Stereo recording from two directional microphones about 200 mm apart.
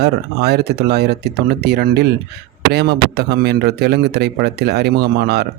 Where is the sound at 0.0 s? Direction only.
55° right (ahead or behind).